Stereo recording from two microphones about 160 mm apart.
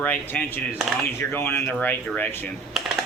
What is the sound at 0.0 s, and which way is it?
Speech, 10° left (ahead or behind).